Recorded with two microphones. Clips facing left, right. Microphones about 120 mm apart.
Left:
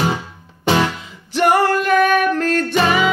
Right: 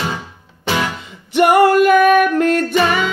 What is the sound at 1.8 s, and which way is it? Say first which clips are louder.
Music: right 4 dB; 5° right (ahead or behind).